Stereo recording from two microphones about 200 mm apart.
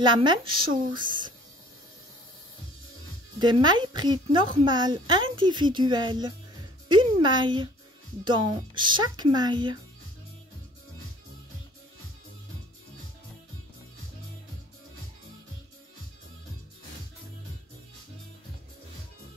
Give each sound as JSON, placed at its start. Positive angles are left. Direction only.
{"t": 0.0, "sound": "speech", "side_deg": -20}
{"t": 3.3, "sound": "speech", "side_deg": -20}